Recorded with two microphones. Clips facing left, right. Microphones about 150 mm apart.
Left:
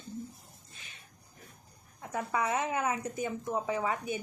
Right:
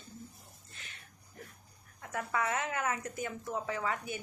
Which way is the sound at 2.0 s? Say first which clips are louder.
Left 2 dB; 20° left (ahead or behind).